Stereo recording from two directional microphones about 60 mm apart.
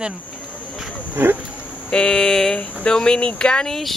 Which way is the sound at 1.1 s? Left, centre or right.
Right.